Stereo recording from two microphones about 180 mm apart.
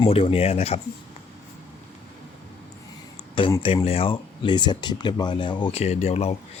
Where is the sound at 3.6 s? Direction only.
30° left (ahead or behind).